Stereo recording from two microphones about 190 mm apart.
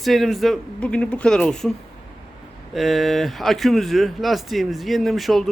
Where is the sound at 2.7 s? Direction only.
Centre (ahead or behind).